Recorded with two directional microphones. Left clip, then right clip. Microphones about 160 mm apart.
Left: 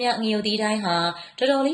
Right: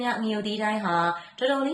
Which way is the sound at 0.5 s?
25° left (ahead or behind).